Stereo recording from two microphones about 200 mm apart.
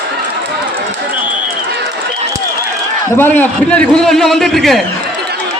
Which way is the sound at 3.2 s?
10° left (ahead or behind).